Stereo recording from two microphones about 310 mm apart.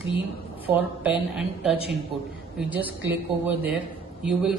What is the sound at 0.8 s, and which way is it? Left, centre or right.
A woman's voice, centre.